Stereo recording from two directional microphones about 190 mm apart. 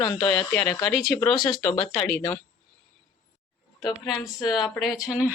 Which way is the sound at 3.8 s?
Centre (ahead or behind).